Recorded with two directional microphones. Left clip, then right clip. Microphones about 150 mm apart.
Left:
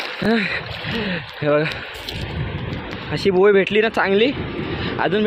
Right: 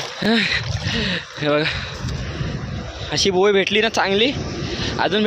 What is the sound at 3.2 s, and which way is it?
Speech, 25° right (ahead or behind).